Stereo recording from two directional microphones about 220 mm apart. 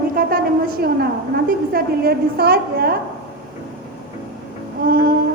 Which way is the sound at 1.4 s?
45° right (ahead or behind).